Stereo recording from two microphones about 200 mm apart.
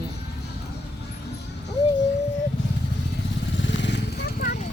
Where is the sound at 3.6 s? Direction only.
65° left (ahead or behind).